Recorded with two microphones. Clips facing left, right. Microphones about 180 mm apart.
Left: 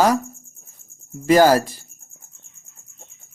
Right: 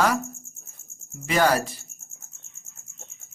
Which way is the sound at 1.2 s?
40° left (ahead or behind).